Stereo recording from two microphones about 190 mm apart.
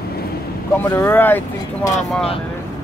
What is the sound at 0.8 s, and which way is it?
Speech, 10° left (ahead or behind).